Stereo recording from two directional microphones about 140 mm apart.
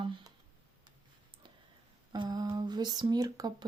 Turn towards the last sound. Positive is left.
turn(degrees=-30)  # may be behind; listen again after turning